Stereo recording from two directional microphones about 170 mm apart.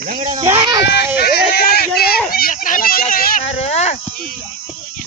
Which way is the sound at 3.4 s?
40° left (ahead or behind).